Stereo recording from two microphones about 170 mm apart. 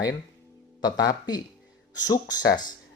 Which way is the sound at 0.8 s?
25° left (ahead or behind).